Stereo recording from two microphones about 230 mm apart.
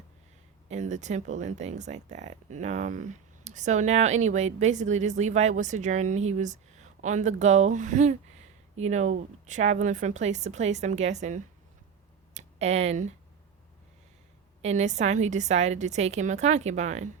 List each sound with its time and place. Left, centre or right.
0.7 s speech: right
12.3 s a sound: right
14.6 s speech: right